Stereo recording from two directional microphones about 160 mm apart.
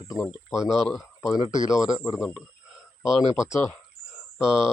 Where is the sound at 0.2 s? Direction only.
5° right (ahead or behind).